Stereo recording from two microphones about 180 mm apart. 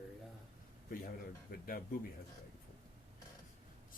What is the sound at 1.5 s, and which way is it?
Speech, 55° left (ahead or behind).